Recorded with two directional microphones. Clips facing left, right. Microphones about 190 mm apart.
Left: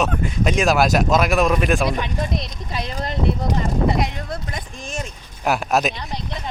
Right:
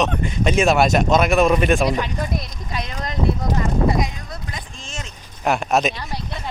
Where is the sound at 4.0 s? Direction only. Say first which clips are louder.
Left 2 dB; 65° left (ahead or behind).